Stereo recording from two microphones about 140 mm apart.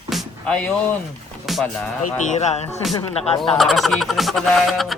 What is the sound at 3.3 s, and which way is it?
Speech, 40° left (ahead or behind).